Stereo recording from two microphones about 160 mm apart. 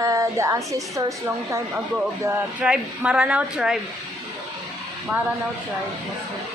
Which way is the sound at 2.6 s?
5° right (ahead or behind).